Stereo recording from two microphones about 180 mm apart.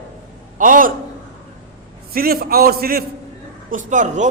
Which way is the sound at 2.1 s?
55° right (ahead or behind).